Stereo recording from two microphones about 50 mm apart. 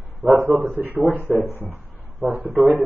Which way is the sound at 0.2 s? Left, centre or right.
Right.